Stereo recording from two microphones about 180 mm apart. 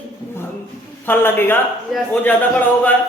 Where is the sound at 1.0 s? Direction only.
10° left (ahead or behind).